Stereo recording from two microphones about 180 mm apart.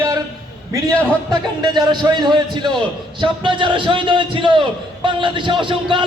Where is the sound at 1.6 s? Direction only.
25° right (ahead or behind).